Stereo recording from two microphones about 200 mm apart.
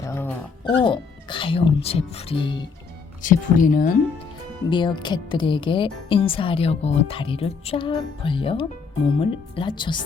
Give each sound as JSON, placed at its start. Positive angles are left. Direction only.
{"t": 0.0, "sound": "music", "side_deg": 10}
{"t": 0.7, "sound": "speech", "side_deg": 25}
{"t": 3.2, "sound": "speech", "side_deg": 40}
{"t": 4.7, "sound": "speech", "side_deg": 25}